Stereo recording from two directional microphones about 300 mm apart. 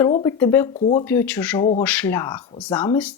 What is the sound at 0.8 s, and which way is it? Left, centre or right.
Speech, left.